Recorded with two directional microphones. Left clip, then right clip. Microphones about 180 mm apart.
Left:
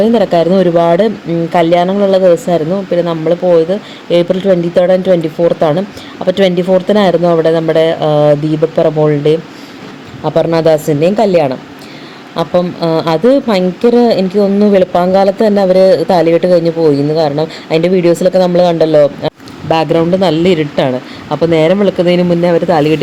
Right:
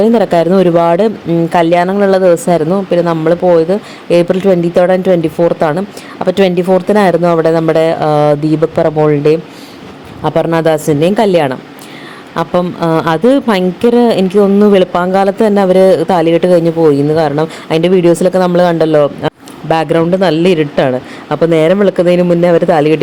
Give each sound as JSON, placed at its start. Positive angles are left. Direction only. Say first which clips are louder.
{"t": 0.0, "sound": "speech", "louder": "even", "side_deg": -25}